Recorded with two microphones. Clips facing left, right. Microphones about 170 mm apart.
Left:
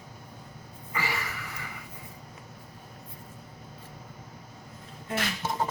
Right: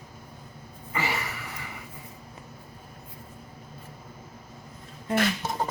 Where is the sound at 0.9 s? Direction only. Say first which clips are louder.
Right 3 dB; 25° right (ahead or behind).